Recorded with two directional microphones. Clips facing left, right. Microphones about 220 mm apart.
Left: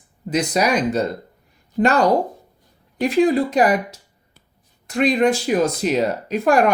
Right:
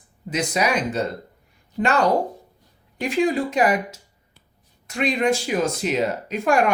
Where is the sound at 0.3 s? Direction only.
40° left (ahead or behind).